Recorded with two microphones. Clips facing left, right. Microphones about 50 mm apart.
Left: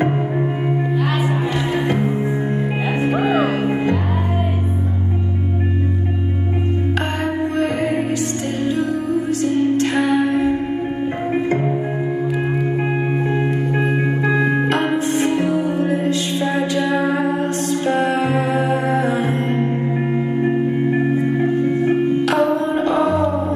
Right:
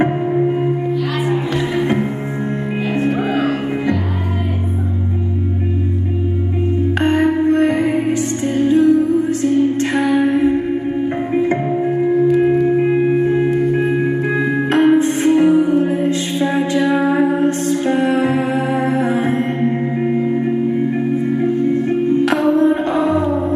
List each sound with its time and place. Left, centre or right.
3.0 s music: centre
7.0 s music: right
12.3 s singing bowl: centre
14.7 s music: right
22.8 s music: right